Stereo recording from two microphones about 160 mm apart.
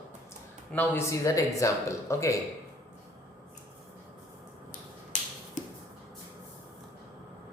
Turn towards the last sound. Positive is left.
turn(degrees=50)  # may be behind; listen again after turning